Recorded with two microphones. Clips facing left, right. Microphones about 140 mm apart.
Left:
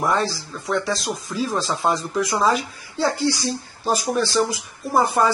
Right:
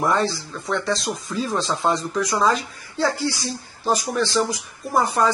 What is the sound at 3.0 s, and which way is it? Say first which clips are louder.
A woman's voice: left 2 dB; 20° left (ahead or behind).